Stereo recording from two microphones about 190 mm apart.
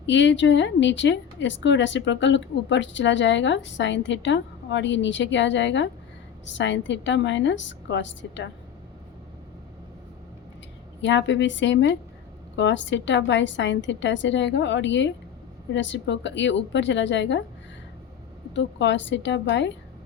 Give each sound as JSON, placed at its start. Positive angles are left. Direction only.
{"t": 0.0, "sound": "a woman's voice", "side_deg": 70}
{"t": 11.0, "sound": "a woman's voice", "side_deg": 70}
{"t": 18.5, "sound": "a woman's voice", "side_deg": 70}